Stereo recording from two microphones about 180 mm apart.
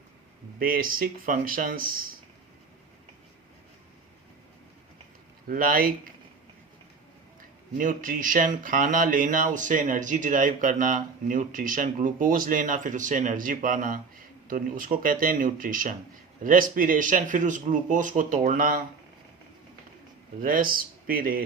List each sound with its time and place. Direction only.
0.6 s speech: 50° right (ahead or behind)
5.5 s speech: 50° right (ahead or behind)
7.8 s speech: 50° right (ahead or behind)
20.4 s speech: 50° right (ahead or behind)